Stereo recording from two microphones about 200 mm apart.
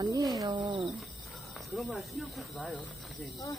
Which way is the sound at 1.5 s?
Centre (ahead or behind).